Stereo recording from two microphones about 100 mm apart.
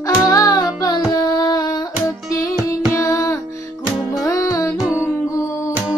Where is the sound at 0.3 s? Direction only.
35° left (ahead or behind).